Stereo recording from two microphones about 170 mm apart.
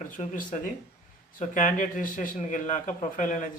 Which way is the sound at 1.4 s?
50° left (ahead or behind).